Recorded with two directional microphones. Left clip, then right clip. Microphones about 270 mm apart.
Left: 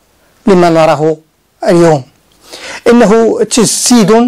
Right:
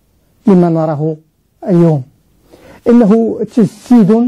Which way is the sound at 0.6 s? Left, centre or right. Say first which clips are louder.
Left 7 dB; left.